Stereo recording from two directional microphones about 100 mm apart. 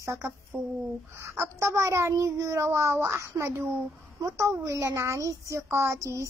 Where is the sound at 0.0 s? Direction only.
30° right (ahead or behind).